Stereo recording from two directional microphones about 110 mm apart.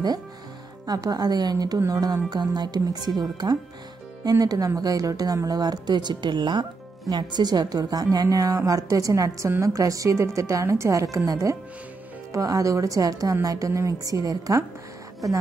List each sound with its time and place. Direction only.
0.8 s a woman's voice: 35° right (ahead or behind)